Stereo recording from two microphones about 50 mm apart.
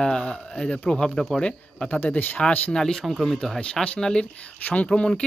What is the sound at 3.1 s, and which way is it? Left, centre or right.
Speech, centre.